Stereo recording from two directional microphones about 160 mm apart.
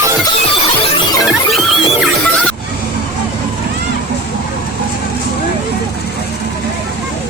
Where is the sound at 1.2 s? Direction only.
Centre (ahead or behind).